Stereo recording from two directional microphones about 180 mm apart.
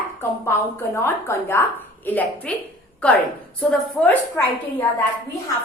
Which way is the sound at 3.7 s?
5° left (ahead or behind).